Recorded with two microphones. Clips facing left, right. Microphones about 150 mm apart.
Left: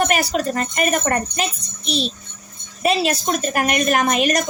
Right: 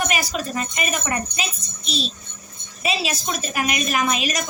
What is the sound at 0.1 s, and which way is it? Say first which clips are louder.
A woman's voice: left 5 dB; 65° left (ahead or behind).